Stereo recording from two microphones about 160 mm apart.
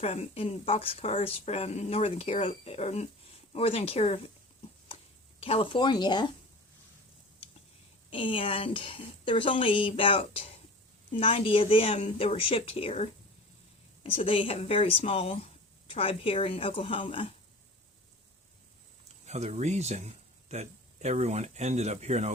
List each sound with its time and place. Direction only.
0.0 s speech: 40° left (ahead or behind)
5.4 s speech: 35° left (ahead or behind)
8.1 s speech: 30° left (ahead or behind)
19.2 s speech: 45° right (ahead or behind)